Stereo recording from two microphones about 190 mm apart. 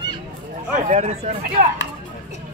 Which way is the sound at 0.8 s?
40° right (ahead or behind).